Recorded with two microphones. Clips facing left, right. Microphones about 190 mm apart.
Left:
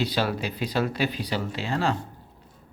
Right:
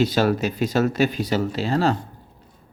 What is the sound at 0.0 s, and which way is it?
Speech, 45° right (ahead or behind).